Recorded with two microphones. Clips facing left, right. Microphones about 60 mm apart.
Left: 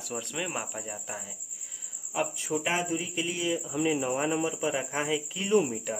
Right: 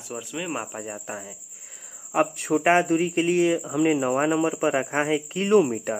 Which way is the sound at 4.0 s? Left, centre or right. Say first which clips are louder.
Right 6 dB; right.